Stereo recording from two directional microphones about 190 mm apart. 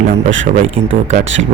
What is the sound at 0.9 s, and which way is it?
Speech, 40° right (ahead or behind).